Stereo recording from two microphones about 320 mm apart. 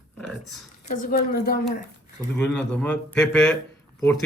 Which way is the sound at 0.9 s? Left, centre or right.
Left.